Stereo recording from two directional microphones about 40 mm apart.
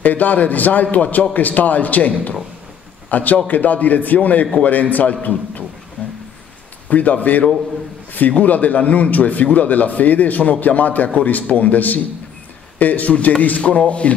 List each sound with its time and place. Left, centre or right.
0.0 s a man's voice: left
6.9 s a man's voice: left
13.6 s speech: left